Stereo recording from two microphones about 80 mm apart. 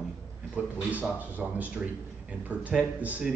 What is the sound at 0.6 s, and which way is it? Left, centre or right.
A man's voice, centre.